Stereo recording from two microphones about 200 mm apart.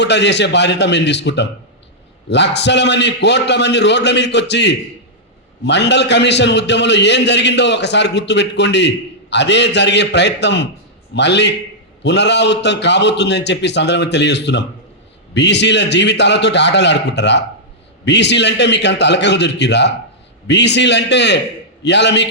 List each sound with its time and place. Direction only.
0.0 s a man's voice: 60° left (ahead or behind)